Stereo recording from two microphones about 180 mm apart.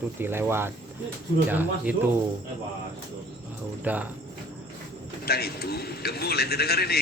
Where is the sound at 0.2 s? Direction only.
10° right (ahead or behind).